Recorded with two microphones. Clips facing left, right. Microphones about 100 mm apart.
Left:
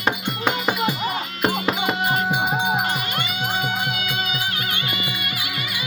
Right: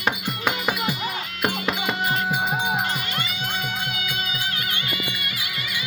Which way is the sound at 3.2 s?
50° left (ahead or behind).